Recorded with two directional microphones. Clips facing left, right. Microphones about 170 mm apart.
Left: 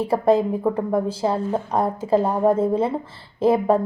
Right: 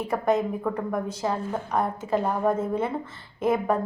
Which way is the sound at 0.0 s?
30° left (ahead or behind).